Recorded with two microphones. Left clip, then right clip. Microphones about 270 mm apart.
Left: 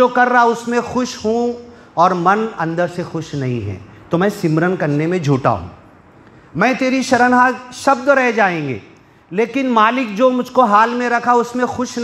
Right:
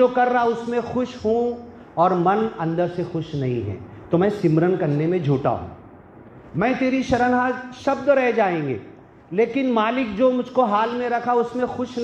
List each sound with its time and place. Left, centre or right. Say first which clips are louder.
0.0 s a man's voice: left 6 dB; left
6.6 s a man's voice: left 6 dB; left